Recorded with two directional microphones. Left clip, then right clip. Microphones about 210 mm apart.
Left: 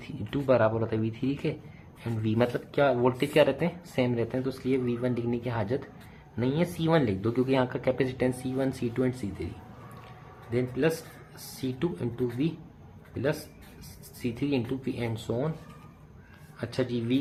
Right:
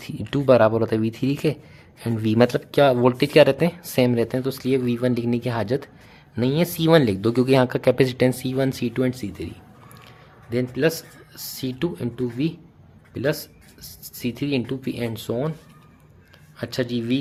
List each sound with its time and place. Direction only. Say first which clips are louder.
0.0 s speech: right 9 dB; 55° right (ahead or behind)
10.5 s speech: right 6 dB; 45° right (ahead or behind)
14.2 s speech: right 5 dB; 45° right (ahead or behind)
16.6 s speech: right 5 dB; 45° right (ahead or behind)